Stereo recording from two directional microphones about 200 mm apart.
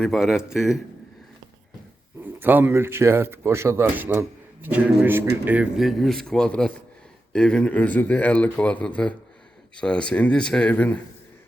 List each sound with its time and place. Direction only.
0.0 s speech: centre (ahead or behind)
2.4 s speech: 10° right (ahead or behind); by 10.9 s 5° left (ahead or behind)